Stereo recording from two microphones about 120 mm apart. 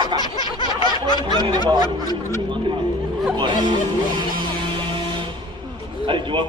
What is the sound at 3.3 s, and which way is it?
Speech, 40° right (ahead or behind).